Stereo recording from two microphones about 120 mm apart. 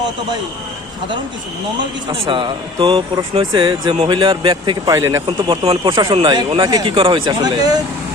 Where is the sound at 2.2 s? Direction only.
45° right (ahead or behind).